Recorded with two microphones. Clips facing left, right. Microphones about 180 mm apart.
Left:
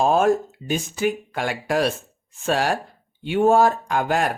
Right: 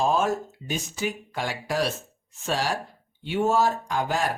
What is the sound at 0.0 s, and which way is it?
Speech, 55° left (ahead or behind).